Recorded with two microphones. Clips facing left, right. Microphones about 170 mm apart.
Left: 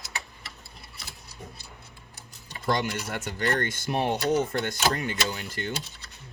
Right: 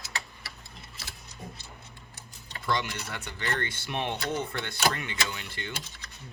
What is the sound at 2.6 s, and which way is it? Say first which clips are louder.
Speech: left 4 dB; 40° left (ahead or behind).